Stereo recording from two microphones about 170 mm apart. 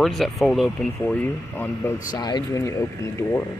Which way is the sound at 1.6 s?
10° left (ahead or behind).